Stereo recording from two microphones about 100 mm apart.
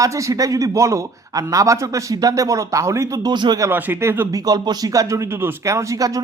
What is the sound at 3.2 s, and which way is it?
Speech, 45° right (ahead or behind).